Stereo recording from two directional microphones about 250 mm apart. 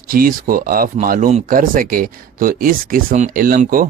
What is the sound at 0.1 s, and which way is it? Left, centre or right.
Speech, right.